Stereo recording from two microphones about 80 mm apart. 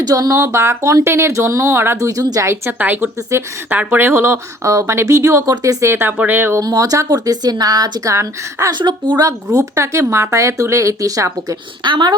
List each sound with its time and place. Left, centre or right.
0.0 s speech: right
2.7 s speech: right
3.3 s speech: right
5.9 s speech: right
6.6 s speech: right
8.1 s speech: right
8.7 s a woman's voice: right
9.2 s speech: right
11.8 s a woman's voice: right